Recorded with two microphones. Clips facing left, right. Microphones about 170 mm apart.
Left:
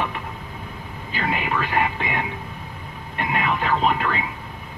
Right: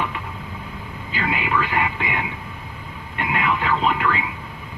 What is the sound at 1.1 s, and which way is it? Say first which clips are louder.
Speech: right 1 dB; 45° left (ahead or behind).